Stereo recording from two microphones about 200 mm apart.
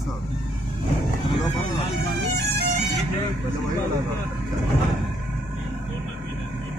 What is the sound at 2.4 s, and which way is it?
Music, 55° right (ahead or behind).